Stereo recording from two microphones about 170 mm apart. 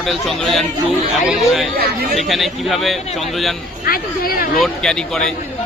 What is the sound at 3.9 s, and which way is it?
Speech, 60° left (ahead or behind).